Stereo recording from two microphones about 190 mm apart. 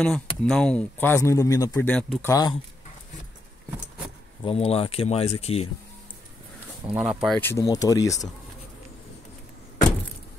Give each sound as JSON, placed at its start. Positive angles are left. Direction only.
{"t": 0.0, "sound": "speech", "side_deg": 5}
{"t": 4.5, "sound": "speech", "side_deg": 30}
{"t": 6.9, "sound": "speech", "side_deg": -5}
{"t": 7.3, "sound": "speech", "side_deg": 15}